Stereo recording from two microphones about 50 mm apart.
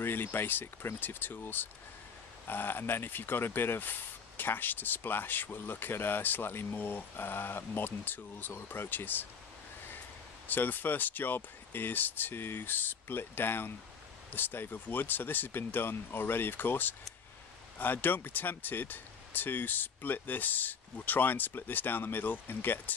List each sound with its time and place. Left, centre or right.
0.0 s speech: left
10.5 s speech: left